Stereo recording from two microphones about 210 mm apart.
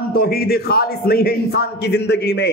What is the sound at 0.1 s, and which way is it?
A man's voice, 45° left (ahead or behind).